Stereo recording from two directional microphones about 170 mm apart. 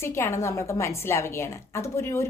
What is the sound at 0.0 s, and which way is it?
A woman's voice, 15° left (ahead or behind).